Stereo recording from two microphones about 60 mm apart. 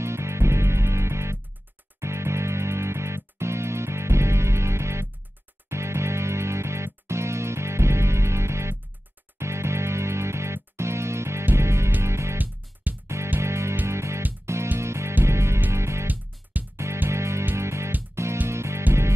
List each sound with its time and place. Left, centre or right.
0.0 s music: right